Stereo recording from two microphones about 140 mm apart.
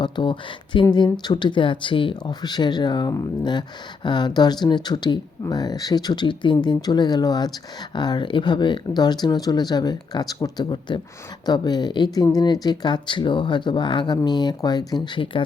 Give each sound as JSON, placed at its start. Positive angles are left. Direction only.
{"t": 0.0, "sound": "speech", "side_deg": 35}